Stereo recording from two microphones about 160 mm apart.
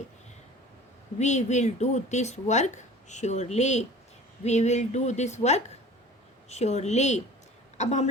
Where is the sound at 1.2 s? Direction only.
45° left (ahead or behind).